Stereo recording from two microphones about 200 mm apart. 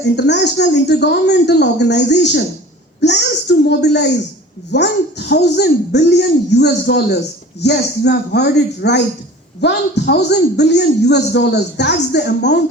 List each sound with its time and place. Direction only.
0.0 s a man's voice: 60° left (ahead or behind)